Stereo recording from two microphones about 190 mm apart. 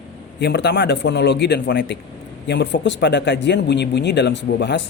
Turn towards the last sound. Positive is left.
turn(degrees=65)  # may be behind; listen again after turning